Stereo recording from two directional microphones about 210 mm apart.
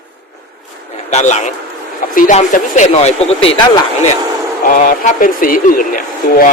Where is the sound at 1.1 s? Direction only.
35° left (ahead or behind).